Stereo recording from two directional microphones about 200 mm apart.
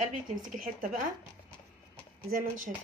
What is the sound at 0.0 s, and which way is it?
Speech, 40° right (ahead or behind).